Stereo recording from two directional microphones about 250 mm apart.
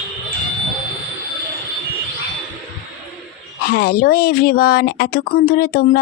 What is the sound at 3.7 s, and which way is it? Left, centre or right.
Speech, left.